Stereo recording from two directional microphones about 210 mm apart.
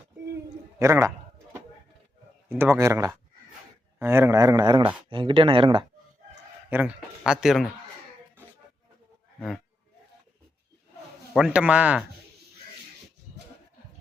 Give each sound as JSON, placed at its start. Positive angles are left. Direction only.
{"t": 0.8, "sound": "speech", "side_deg": -15}
{"t": 2.5, "sound": "speech", "side_deg": -10}
{"t": 6.7, "sound": "speech", "side_deg": -5}
{"t": 11.3, "sound": "speech", "side_deg": -5}